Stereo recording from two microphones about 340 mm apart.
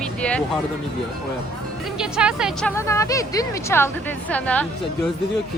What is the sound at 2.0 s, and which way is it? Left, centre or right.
Speech, centre.